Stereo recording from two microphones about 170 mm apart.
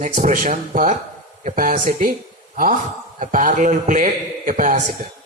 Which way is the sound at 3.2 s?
45° right (ahead or behind).